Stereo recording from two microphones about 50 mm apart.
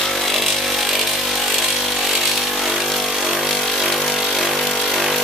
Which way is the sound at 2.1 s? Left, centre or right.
Centre.